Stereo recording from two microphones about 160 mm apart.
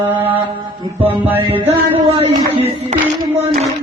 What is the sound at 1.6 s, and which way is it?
Music, 40° right (ahead or behind).